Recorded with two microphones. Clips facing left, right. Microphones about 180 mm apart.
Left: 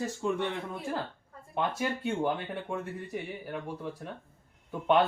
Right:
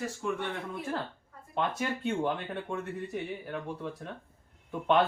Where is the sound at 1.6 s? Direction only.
10° left (ahead or behind).